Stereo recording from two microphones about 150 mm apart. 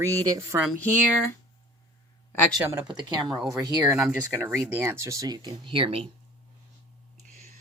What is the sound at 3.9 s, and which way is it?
Speech, 15° right (ahead or behind).